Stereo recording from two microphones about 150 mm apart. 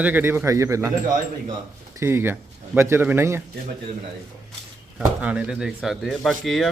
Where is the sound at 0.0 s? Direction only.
15° right (ahead or behind).